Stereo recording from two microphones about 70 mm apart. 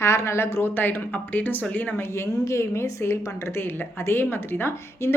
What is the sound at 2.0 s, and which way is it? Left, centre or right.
A woman's voice, left.